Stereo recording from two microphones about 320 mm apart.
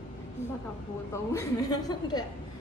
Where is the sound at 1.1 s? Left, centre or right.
Centre.